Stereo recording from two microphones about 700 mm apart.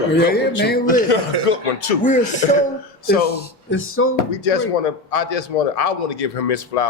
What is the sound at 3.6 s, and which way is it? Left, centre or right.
Speech, centre.